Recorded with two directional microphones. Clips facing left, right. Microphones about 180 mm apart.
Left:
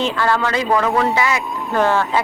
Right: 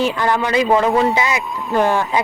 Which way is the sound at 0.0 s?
15° right (ahead or behind).